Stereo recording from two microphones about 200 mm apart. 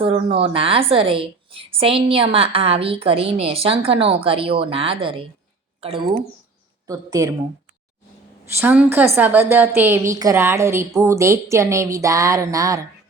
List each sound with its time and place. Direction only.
0.0 s a woman's voice: 25° right (ahead or behind)
6.8 s a woman's voice: 15° right (ahead or behind)
8.5 s a woman's voice: 10° right (ahead or behind)